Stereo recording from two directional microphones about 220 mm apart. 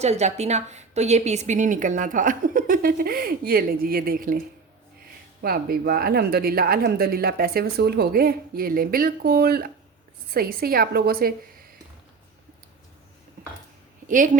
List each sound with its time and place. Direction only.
0.0 s a woman's voice: 30° right (ahead or behind)